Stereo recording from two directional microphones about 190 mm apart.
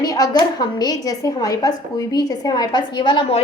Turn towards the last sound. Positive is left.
turn(degrees=30)  # may be behind; listen again after turning